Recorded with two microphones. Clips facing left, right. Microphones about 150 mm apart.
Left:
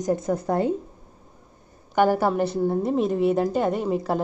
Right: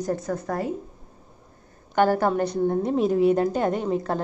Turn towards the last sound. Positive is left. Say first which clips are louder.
# left 1 dB
turn(degrees=5)  # may be behind; listen again after turning